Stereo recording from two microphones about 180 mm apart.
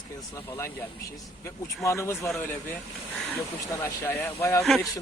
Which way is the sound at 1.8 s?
15° left (ahead or behind).